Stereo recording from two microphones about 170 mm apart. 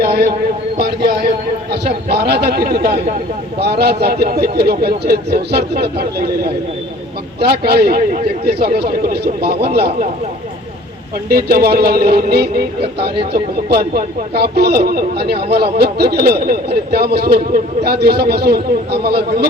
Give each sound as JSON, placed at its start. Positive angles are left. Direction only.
{"t": 0.0, "sound": "a man's voice", "side_deg": -65}
{"t": 0.8, "sound": "a sound", "side_deg": -65}
{"t": 1.7, "sound": "speech", "side_deg": -70}
{"t": 7.6, "sound": "speech", "side_deg": -65}
{"t": 11.3, "sound": "speech", "side_deg": -65}